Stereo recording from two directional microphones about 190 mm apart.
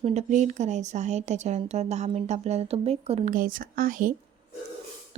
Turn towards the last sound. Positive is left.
turn(degrees=-45)  # may be behind; listen again after turning